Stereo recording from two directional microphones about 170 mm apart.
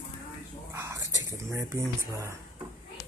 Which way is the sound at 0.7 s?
15° right (ahead or behind).